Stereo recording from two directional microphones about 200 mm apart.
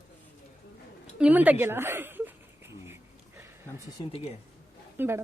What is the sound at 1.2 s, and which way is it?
Speech, 5° right (ahead or behind).